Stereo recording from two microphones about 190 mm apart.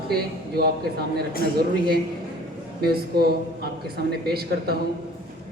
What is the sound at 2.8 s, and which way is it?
Speech, 55° right (ahead or behind).